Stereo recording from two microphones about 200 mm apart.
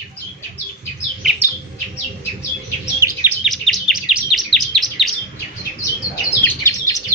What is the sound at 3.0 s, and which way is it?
Chirp, 10° right (ahead or behind).